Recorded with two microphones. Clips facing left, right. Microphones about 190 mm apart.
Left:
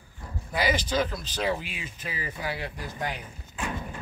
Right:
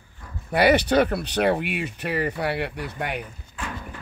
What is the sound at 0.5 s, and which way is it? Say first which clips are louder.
Speech: right 8 dB; 65° right (ahead or behind).